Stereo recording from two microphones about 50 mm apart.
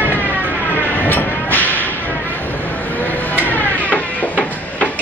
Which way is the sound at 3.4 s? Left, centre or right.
Left.